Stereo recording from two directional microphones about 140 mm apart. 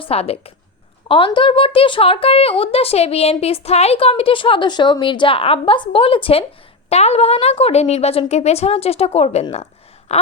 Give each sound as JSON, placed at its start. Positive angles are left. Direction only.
{"t": 0.0, "sound": "a woman's voice", "side_deg": 45}
{"t": 10.1, "sound": "gasp", "side_deg": 50}